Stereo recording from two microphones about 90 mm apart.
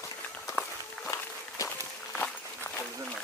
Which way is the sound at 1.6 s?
35° left (ahead or behind).